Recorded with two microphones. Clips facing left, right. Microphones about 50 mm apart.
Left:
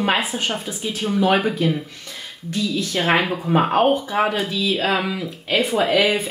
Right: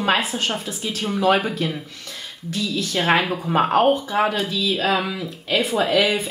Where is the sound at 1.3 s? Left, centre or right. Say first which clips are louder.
Left 2 dB; left.